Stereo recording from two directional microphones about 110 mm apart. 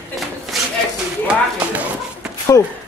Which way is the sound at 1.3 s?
10° right (ahead or behind).